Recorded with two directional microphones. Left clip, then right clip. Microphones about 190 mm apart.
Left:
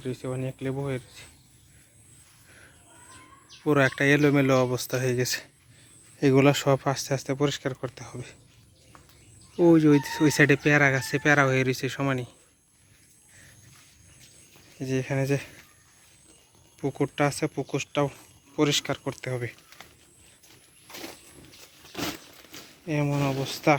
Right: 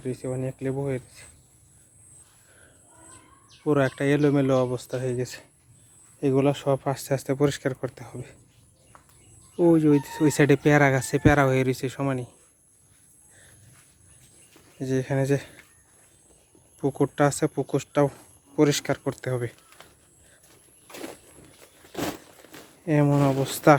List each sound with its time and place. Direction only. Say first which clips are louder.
0.0 s speech: right 2 dB; 15° right (ahead or behind)
3.6 s speech: left 1 dB; centre (ahead or behind)
6.9 s speech: right 2 dB; 15° right (ahead or behind)
9.6 s speech: even; centre (ahead or behind)
14.8 s speech: right 2 dB; 15° right (ahead or behind)
16.8 s speech: right 3 dB; 25° right (ahead or behind)
20.8 s a sound: right 2 dB; 30° right (ahead or behind)
22.9 s speech: right 6 dB; 35° right (ahead or behind)
23.1 s speech: right 5 dB; 20° right (ahead or behind)
23.4 s speech: right 5 dB; 35° right (ahead or behind)